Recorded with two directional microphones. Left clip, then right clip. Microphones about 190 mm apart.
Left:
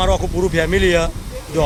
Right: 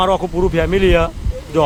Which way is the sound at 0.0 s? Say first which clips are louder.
Right 2 dB; 10° right (ahead or behind).